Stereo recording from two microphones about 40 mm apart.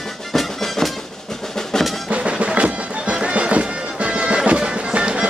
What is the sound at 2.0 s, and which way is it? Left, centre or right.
Bagpipes, right.